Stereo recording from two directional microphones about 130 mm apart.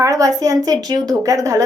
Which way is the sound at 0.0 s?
25° right (ahead or behind).